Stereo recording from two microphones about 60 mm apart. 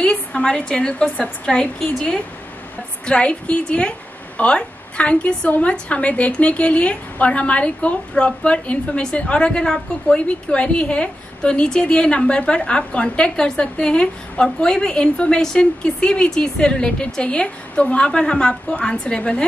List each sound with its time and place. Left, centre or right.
0.0 s a woman's voice: centre